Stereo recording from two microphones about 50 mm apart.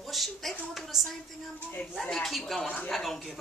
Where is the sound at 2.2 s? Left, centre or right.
Centre.